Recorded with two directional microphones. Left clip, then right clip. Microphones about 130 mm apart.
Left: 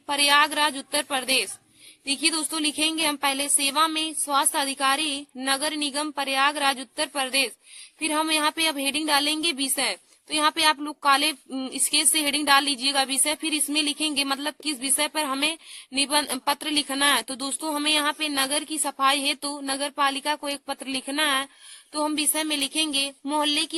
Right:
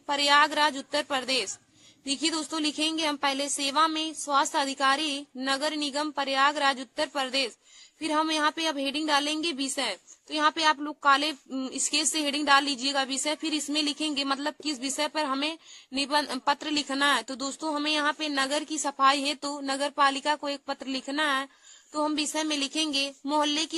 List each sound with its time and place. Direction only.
0.1 s a woman's voice: 15° left (ahead or behind)